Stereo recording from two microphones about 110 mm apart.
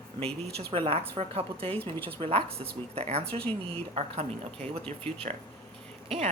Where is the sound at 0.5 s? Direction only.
60° right (ahead or behind).